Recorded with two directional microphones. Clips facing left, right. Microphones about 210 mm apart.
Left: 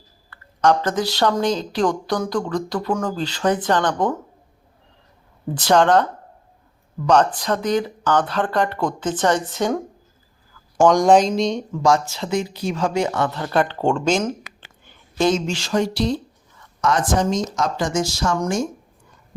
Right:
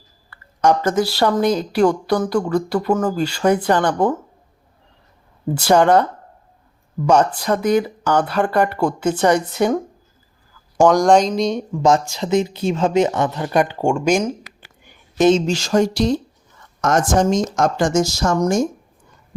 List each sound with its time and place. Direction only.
0.3 s speech: 10° right (ahead or behind)
5.5 s speech: 10° right (ahead or behind)
7.1 s speech: 10° right (ahead or behind)
10.8 s speech: centre (ahead or behind)
11.7 s speech: 20° right (ahead or behind)
14.8 s a sound: 20° right (ahead or behind)
15.4 s speech: 45° right (ahead or behind)